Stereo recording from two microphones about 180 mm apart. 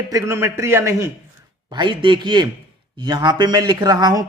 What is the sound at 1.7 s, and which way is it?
Speech, 25° right (ahead or behind).